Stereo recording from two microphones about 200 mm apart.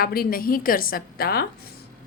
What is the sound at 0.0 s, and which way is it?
A woman's voice, 50° left (ahead or behind).